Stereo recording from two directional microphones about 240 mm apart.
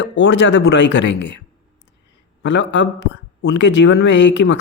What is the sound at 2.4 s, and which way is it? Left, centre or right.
Speech, left.